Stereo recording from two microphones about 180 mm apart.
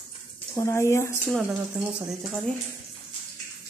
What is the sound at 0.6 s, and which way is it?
Speech, 15° left (ahead or behind).